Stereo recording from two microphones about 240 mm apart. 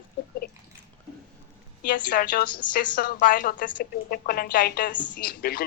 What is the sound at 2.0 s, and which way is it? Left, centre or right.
Speech, left.